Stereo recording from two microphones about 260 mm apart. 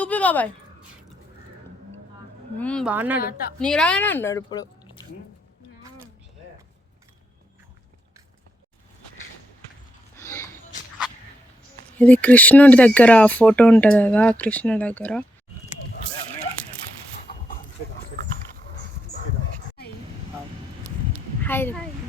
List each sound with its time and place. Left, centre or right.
0.0 s a sound: centre
2.6 s speech: centre
2.9 s a woman's voice: centre
3.2 s a woman's voice: left
3.6 s speech: centre
10.2 s a sound: centre
11.9 s speech: centre
21.4 s speech: centre